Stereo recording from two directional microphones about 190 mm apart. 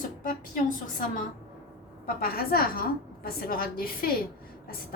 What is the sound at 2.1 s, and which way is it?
A woman's voice, 50° left (ahead or behind).